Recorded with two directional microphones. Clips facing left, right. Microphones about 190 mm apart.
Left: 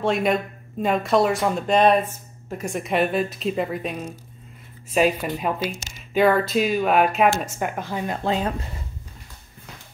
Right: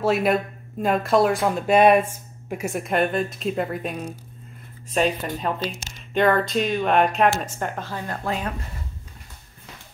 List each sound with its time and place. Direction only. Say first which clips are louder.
0.0 s speech: right 1 dB; 5° right (ahead or behind); by 8.2 s 15° left (ahead or behind)
8.2 s speech: left 4 dB; 25° left (ahead or behind)